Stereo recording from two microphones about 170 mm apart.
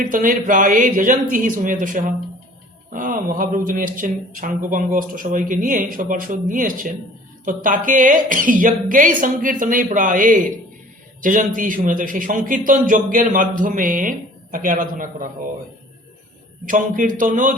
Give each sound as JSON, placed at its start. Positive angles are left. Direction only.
{"t": 0.0, "sound": "a man's voice", "side_deg": -50}
{"t": 16.6, "sound": "a man's voice", "side_deg": -50}